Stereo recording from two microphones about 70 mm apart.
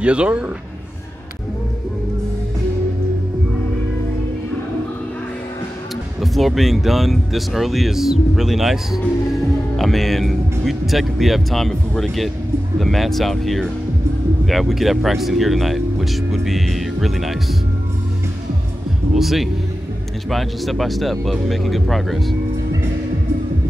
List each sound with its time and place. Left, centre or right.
0.0 s speech: centre
6.2 s speech: centre
19.1 s speech: centre